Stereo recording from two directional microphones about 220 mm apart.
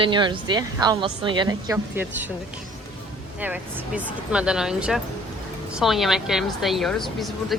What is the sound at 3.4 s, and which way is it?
A woman's voice, 5° right (ahead or behind).